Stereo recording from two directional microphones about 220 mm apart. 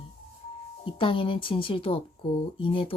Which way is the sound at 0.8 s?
25° left (ahead or behind).